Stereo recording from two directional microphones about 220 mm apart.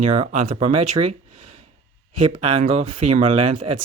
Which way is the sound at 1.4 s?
90° right.